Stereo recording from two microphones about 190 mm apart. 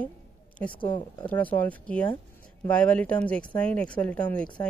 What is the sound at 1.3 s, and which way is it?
Speech, 10° left (ahead or behind).